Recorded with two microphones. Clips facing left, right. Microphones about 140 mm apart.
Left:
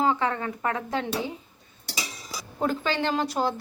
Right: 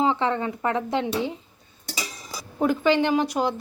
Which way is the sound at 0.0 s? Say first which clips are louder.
Right 2 dB; 20° right (ahead or behind).